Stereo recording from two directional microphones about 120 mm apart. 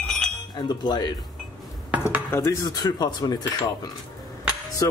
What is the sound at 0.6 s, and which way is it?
Speech, 35° left (ahead or behind).